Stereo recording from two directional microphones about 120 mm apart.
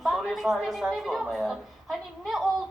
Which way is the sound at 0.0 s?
Centre (ahead or behind).